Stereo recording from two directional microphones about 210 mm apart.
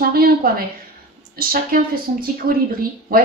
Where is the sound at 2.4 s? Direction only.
45° right (ahead or behind).